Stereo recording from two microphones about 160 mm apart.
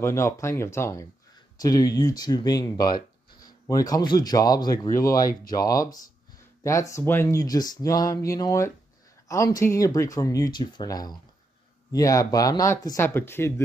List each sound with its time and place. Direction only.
0.0 s speech: 15° left (ahead or behind)